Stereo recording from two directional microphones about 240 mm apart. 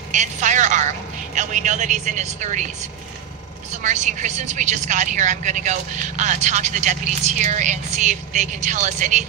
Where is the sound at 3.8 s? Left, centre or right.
Right.